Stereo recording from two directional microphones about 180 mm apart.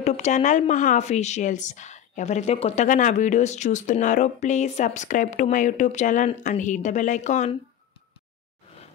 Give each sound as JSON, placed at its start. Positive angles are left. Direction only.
{"t": 0.0, "sound": "speech", "side_deg": 40}